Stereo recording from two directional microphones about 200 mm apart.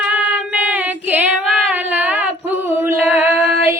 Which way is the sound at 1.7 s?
10° right (ahead or behind).